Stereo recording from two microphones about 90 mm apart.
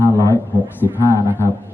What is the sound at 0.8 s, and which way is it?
Speech, 25° right (ahead or behind).